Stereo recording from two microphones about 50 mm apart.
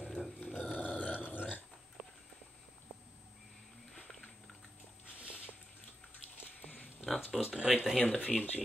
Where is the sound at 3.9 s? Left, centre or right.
Centre.